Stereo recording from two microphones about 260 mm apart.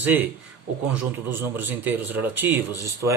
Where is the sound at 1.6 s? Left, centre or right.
Centre.